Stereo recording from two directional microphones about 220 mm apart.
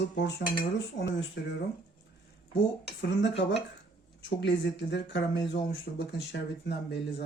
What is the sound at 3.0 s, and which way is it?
Speech, 55° left (ahead or behind).